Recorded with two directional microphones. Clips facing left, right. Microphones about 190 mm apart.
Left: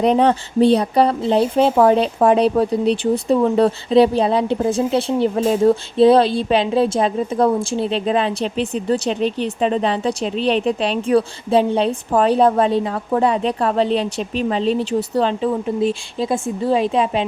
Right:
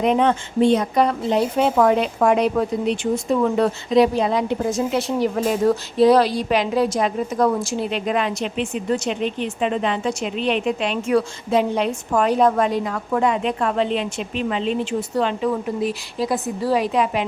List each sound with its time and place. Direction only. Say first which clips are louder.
0.0 s speech: left 3 dB; 35° left (ahead or behind)